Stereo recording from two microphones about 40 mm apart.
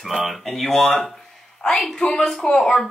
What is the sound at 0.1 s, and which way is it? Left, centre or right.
A woman's voice, centre.